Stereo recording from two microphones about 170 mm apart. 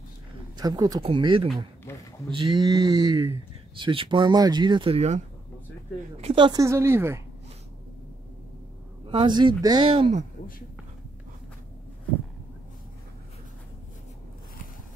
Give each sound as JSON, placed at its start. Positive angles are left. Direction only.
{"t": 0.6, "sound": "speech", "side_deg": -25}
{"t": 6.2, "sound": "a woman's voice", "side_deg": -30}
{"t": 9.1, "sound": "speech", "side_deg": -25}